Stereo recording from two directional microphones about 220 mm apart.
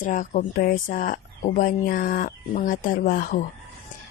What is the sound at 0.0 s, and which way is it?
Speech, 35° left (ahead or behind).